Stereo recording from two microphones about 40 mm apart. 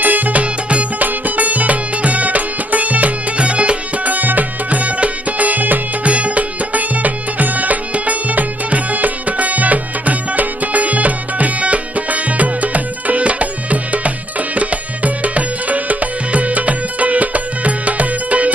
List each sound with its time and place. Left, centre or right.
0.0 s music: right
6.1 s music: right